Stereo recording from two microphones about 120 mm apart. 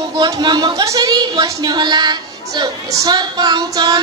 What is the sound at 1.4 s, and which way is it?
A woman's voice, 35° right (ahead or behind).